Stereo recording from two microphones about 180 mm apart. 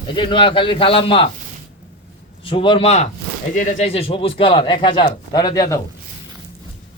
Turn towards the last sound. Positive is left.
turn(degrees=20)  # may be behind; listen again after turning